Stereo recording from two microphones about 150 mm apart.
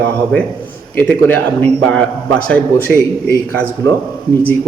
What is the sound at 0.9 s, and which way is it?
A man's voice, 10° left (ahead or behind).